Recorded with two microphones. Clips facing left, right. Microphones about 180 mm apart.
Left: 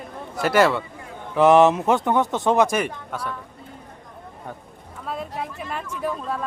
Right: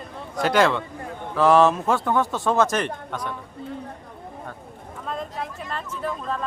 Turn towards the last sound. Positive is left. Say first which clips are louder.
# left 1 dB
turn(degrees=10)  # may be behind; listen again after turning